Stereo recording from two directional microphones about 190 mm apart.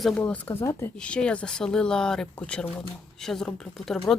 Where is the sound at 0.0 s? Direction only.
5° left (ahead or behind).